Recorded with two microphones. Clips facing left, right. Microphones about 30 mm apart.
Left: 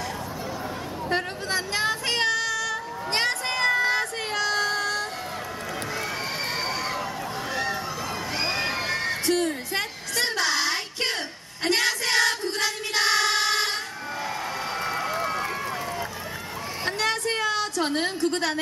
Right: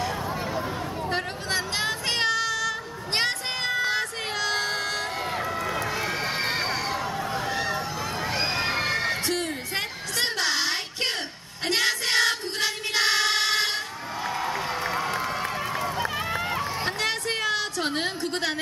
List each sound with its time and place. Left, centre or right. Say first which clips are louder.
1.7 s child singing: left 2 dB; centre
4.5 s music: left 2 dB; centre
4.7 s vehicle: left 2 dB; right
5.9 s run: right 2 dB; centre
8.3 s neigh: even; centre
9.4 s a sound: left 3 dB; centre
11.8 s music: right 1 dB; centre
14.8 s run: even; centre
16.8 s a sound: left 1 dB; centre